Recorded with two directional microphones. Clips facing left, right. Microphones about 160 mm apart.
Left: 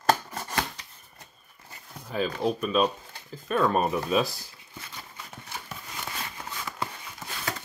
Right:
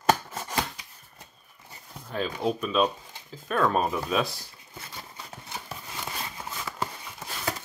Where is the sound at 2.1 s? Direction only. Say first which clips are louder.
Left 1 dB; 5° left (ahead or behind).